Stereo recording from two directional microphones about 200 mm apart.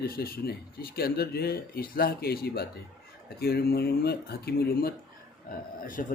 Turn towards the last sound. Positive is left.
turn(degrees=45)  # may be behind; listen again after turning